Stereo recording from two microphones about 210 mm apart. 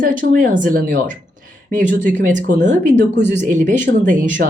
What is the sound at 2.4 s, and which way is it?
Speech, 35° right (ahead or behind).